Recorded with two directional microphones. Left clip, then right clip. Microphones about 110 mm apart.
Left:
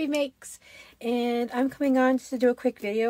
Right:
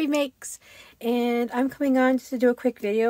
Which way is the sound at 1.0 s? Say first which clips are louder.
Right 3 dB; 30° right (ahead or behind).